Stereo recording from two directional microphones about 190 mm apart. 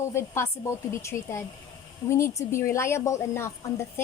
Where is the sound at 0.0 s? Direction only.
15° left (ahead or behind).